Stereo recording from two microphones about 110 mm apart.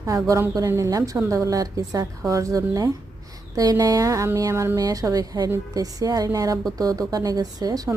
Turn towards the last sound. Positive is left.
turn(degrees=-35)  # may be behind; listen again after turning